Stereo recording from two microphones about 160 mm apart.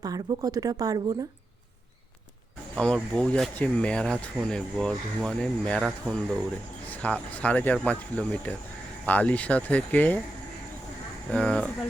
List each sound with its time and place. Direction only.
0.0 s speech: 25° right (ahead or behind)
2.7 s speech: 5° left (ahead or behind)
11.3 s speech: 5° left (ahead or behind)